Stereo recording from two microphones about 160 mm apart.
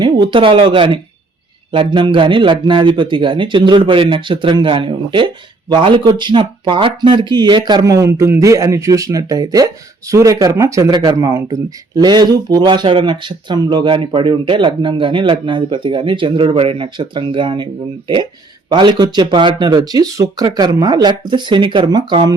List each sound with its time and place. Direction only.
0.0 s a man's voice: 30° right (ahead or behind)
18.7 s a man's voice: 30° right (ahead or behind)